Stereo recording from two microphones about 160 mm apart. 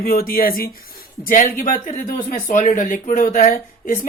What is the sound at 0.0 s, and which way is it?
Speech, 65° left (ahead or behind).